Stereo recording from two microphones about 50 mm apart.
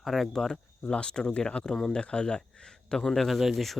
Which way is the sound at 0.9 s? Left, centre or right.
Centre.